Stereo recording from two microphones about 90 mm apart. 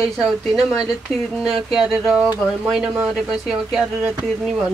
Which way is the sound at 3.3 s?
10° right (ahead or behind).